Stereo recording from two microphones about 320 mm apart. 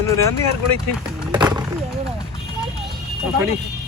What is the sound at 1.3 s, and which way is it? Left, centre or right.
Skateboard, centre.